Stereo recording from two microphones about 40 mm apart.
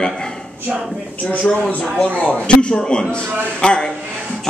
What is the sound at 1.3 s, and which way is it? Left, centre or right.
A man's voice, left.